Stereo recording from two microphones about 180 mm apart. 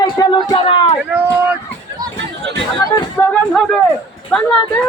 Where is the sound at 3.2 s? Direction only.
5° left (ahead or behind).